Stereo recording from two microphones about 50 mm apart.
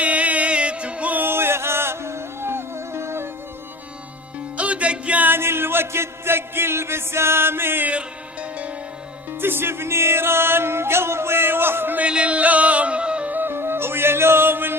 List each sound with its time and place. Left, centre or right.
0.0 s music: right
1.2 s music: right
4.5 s music: right
5.2 s music: right
7.9 s music: right
9.4 s music: right
11.9 s music: right
13.3 s music: right